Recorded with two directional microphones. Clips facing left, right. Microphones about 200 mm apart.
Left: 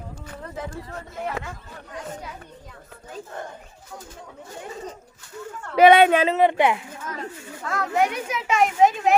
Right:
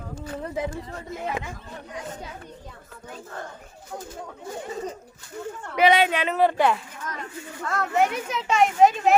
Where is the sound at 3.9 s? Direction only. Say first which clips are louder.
Right 5 dB; 30° right (ahead or behind).